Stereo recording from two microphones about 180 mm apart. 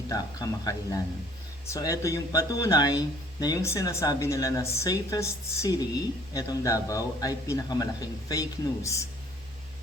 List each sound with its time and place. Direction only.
0.1 s a man's voice: 20° left (ahead or behind)